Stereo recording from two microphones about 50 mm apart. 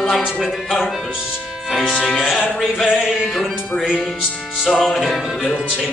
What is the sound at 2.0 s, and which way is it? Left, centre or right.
Speech, centre.